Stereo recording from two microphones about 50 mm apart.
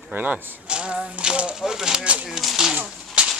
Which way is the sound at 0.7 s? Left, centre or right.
Centre.